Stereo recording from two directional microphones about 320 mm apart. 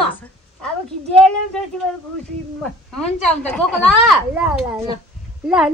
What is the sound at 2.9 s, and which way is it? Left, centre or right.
Speech, centre.